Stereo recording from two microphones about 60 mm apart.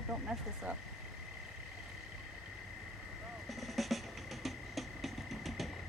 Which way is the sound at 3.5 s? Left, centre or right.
Centre.